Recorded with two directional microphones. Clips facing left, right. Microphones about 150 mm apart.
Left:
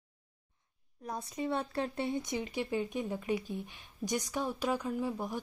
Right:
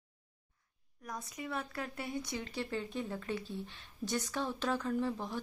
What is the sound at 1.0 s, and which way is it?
Speech, 30° left (ahead or behind).